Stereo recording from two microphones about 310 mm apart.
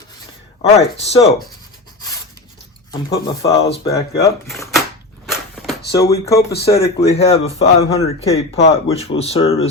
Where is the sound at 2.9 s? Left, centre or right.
Centre.